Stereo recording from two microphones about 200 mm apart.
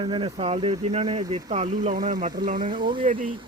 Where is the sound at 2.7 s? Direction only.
25° right (ahead or behind).